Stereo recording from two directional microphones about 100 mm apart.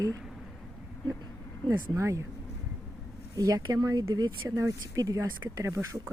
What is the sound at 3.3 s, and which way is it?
Speech, 40° right (ahead or behind).